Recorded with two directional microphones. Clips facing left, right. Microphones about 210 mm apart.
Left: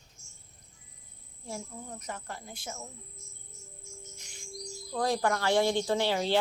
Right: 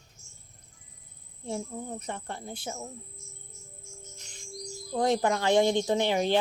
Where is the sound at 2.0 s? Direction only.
30° right (ahead or behind).